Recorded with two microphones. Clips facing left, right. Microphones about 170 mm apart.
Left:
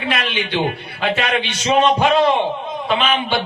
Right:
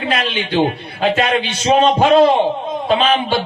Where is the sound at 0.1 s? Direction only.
35° right (ahead or behind).